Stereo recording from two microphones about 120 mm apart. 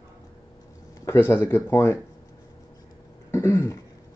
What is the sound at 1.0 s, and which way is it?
Speech, 20° left (ahead or behind).